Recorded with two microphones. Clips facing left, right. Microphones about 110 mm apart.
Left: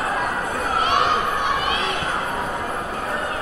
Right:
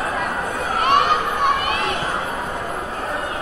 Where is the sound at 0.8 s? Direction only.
55° right (ahead or behind).